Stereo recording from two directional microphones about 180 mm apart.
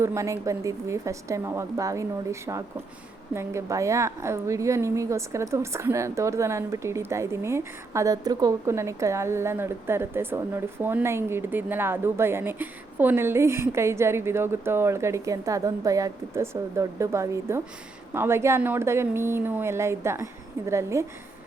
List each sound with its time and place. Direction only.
0.0 s a woman's voice: 15° right (ahead or behind)